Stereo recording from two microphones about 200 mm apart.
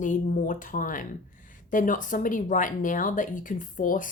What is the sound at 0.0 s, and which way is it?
Speech, 40° left (ahead or behind).